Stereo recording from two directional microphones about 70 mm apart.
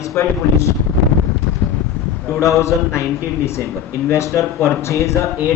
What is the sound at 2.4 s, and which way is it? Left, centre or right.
A man's voice, left.